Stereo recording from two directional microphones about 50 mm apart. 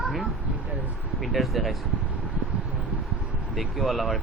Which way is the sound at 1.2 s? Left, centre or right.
Centre.